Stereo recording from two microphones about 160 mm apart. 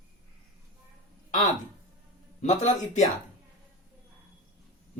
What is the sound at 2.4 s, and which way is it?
Speech, 50° left (ahead or behind).